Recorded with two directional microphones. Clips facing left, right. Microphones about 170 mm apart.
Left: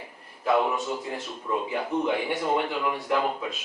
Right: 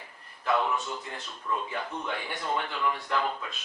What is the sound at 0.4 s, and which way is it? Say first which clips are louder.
Speech: left 4 dB; 15° left (ahead or behind).